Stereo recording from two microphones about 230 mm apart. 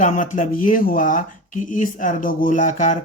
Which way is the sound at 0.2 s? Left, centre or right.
Left.